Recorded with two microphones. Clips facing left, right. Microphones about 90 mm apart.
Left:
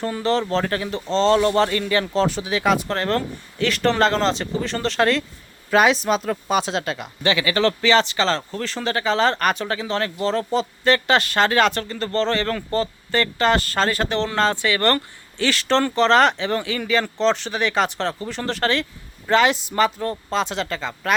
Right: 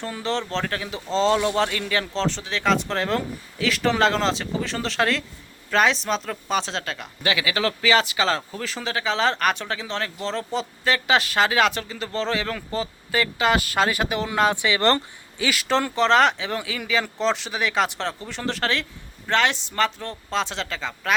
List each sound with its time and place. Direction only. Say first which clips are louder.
0.0 s speech: left 5 dB; centre (ahead or behind); by 15.4 s 20° right (ahead or behind)
15.4 s speech: left 3 dB; 5° right (ahead or behind)